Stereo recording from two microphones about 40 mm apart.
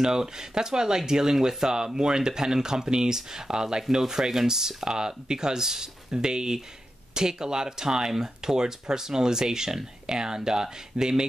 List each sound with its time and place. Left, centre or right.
0.0 s speech: centre